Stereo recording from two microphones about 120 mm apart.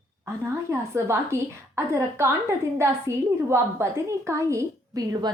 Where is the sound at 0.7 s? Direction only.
25° right (ahead or behind).